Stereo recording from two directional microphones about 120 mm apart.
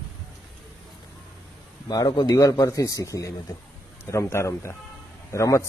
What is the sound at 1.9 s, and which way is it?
A man's voice, 35° left (ahead or behind).